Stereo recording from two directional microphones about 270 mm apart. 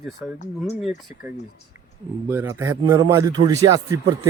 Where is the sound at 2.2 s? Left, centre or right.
Centre.